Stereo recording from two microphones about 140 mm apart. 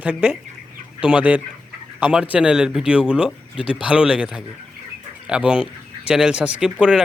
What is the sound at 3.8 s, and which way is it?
Speech, 5° right (ahead or behind).